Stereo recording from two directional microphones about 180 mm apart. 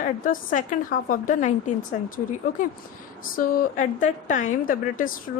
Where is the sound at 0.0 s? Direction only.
45° left (ahead or behind).